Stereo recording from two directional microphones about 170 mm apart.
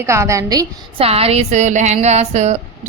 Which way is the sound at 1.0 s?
35° right (ahead or behind).